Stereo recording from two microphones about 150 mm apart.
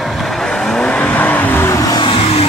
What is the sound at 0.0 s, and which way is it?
Vehicle, centre (ahead or behind).